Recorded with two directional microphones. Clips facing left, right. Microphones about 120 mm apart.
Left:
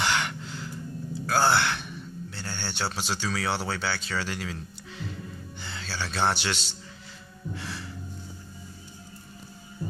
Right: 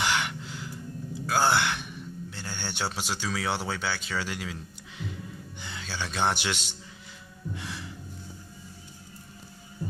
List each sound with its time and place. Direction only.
0.0 s gasp: 10° right (ahead or behind)
1.2 s speech: 15° right (ahead or behind)